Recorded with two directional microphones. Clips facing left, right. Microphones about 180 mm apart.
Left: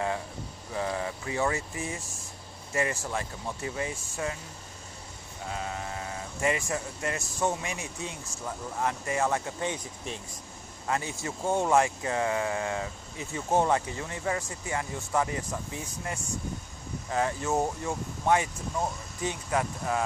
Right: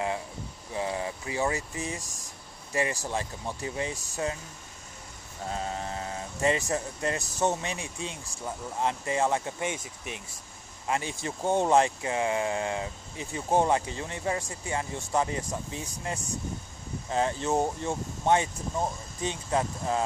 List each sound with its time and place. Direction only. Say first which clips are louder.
0.7 s speech: even; 20° right (ahead or behind)
5.5 s speech: right 2 dB; 35° right (ahead or behind); by 10.4 s 15° right (ahead or behind)
10.9 s speech: right 1 dB; 25° right (ahead or behind)